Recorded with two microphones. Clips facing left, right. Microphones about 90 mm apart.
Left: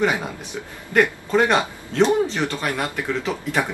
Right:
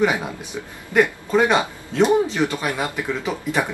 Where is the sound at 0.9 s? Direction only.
5° right (ahead or behind).